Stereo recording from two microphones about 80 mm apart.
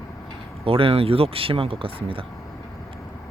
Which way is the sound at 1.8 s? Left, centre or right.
Right.